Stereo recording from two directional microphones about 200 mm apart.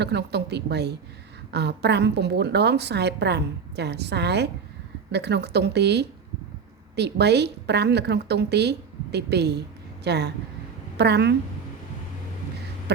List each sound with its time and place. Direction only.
0.0 s a woman's voice: 55° right (ahead or behind)